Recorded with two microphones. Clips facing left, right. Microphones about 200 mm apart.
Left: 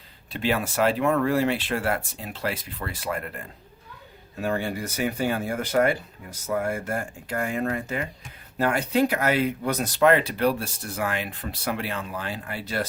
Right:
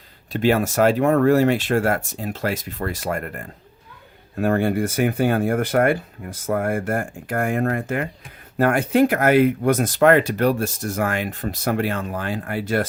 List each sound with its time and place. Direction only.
0.3 s speech: 45° right (ahead or behind)